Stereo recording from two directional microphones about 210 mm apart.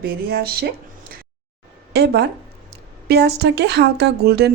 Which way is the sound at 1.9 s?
50° right (ahead or behind).